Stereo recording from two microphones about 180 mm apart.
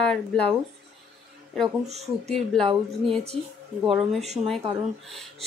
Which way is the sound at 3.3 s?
30° right (ahead or behind).